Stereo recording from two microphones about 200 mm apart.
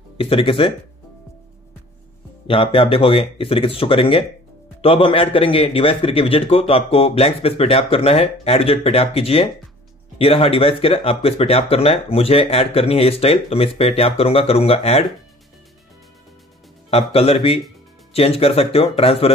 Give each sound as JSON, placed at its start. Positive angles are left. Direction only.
{"t": 0.2, "sound": "speech", "side_deg": 25}
{"t": 2.4, "sound": "speech", "side_deg": 25}
{"t": 16.9, "sound": "speech", "side_deg": 30}